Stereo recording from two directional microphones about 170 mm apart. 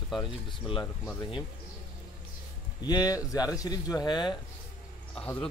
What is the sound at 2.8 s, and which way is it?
Speech, 20° left (ahead or behind).